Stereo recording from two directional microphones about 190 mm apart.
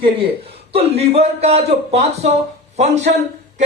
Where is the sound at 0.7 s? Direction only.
30° right (ahead or behind).